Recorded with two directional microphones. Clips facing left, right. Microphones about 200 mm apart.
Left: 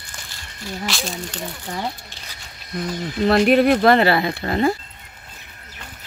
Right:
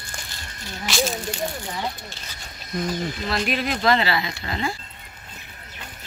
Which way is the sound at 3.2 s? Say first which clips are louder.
Left 13 dB; 60° left (ahead or behind).